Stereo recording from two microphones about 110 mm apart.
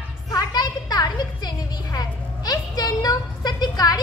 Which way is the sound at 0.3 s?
35° left (ahead or behind).